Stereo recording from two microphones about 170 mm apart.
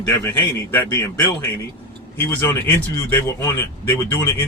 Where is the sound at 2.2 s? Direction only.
10° left (ahead or behind).